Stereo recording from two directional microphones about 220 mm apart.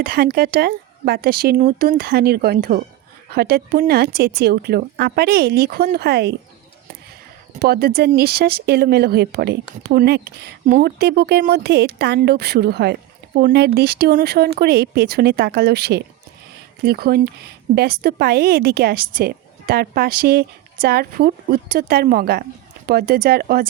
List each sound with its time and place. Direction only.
0.0 s speech: 40° right (ahead or behind)
7.6 s speech: 45° right (ahead or behind)